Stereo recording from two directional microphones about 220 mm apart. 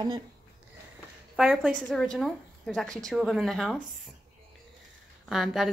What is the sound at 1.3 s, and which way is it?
A woman's voice, 5° right (ahead or behind).